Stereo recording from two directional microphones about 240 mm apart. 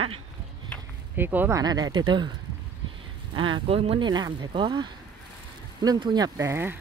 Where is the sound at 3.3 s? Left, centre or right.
Right.